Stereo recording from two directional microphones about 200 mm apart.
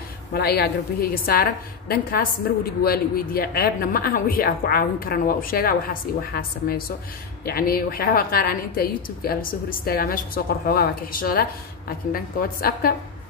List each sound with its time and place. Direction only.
0.3 s a woman's voice: 50° left (ahead or behind)
7.4 s a woman's voice: 45° left (ahead or behind)